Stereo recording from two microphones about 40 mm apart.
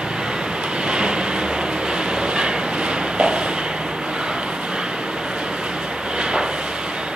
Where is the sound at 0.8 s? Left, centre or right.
Right.